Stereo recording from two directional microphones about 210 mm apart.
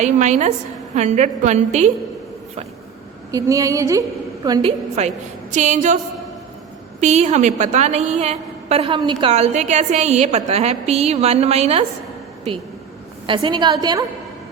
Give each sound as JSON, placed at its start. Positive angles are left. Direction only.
{"t": 0.0, "sound": "a woman's voice", "side_deg": -35}
{"t": 3.3, "sound": "a woman's voice", "side_deg": -15}
{"t": 4.9, "sound": "a woman's voice", "side_deg": -35}
{"t": 7.0, "sound": "a woman's voice", "side_deg": -35}
{"t": 13.2, "sound": "a woman's voice", "side_deg": -25}